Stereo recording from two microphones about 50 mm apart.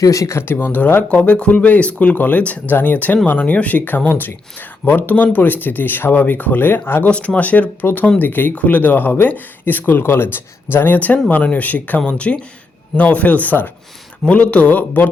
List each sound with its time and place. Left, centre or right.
0.1 s speech: left
0.4 s speech: left
1.1 s speech: left
7.0 s speech: left
14.3 s speech: left